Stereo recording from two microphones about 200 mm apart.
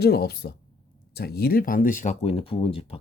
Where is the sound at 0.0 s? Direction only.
50° left (ahead or behind).